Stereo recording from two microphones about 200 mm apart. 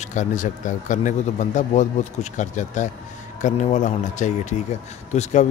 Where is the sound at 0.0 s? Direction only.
35° left (ahead or behind).